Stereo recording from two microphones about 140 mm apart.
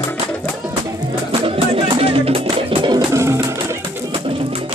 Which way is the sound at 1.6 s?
40° right (ahead or behind).